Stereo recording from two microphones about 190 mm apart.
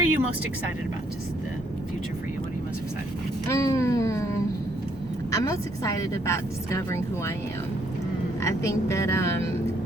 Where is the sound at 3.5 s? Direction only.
15° left (ahead or behind).